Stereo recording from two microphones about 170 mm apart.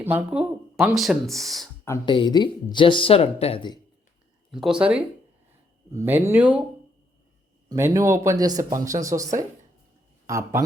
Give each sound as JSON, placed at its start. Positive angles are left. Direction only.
{"t": 0.0, "sound": "speech", "side_deg": -10}
{"t": 2.0, "sound": "speech", "side_deg": 25}
{"t": 4.5, "sound": "speech", "side_deg": -5}
{"t": 7.7, "sound": "speech", "side_deg": -15}